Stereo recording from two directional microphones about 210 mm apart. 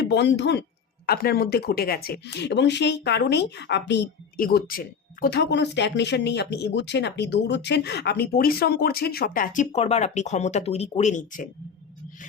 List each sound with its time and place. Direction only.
0.0 s speech: 55° left (ahead or behind); by 11.4 s 40° left (ahead or behind)